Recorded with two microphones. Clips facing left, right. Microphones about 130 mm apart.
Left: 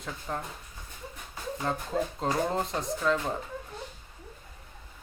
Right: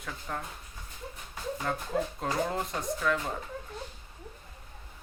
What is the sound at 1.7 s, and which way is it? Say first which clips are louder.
Speech: left 2 dB; 25° left (ahead or behind).